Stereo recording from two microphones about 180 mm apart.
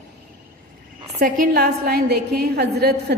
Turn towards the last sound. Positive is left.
turn(degrees=-60)  # may be behind; listen again after turning